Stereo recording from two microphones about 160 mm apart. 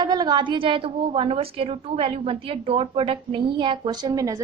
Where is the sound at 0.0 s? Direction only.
25° right (ahead or behind).